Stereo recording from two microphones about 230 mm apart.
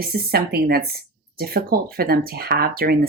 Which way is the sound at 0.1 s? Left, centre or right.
Right.